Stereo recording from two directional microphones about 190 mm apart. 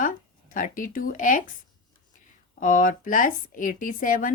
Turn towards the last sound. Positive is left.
turn(degrees=45)  # may be behind; listen again after turning